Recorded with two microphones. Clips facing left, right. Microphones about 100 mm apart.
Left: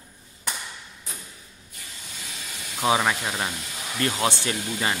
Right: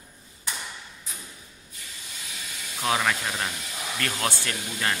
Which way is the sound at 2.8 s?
15° left (ahead or behind).